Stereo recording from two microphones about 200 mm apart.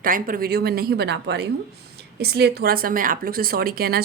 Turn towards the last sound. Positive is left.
turn(degrees=-50)  # may be behind; listen again after turning